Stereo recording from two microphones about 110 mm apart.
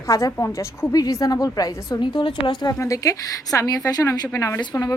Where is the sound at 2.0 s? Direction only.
45° left (ahead or behind).